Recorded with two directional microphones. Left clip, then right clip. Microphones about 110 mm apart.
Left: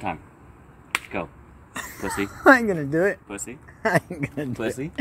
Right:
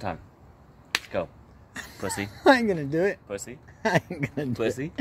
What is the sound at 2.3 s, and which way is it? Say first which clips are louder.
Speech: left 4 dB; 20° right (ahead or behind).